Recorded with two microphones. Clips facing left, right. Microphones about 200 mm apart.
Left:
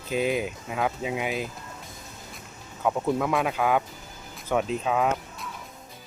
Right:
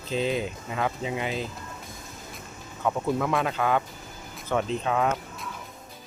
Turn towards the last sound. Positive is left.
turn(degrees=5)  # may be behind; listen again after turning